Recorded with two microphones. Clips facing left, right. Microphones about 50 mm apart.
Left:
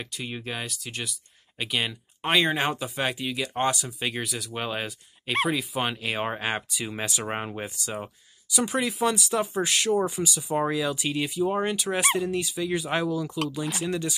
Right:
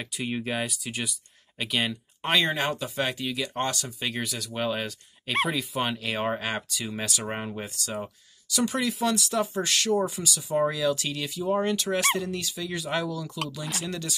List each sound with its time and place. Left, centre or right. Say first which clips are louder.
0.0 s speech: right 3 dB; centre
2.5 s speech: left 1 dB; centre